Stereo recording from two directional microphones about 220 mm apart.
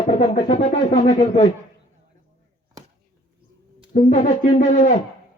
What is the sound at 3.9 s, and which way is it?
Speech, 30° left (ahead or behind).